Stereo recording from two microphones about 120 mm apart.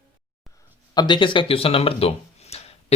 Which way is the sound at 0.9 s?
40° left (ahead or behind).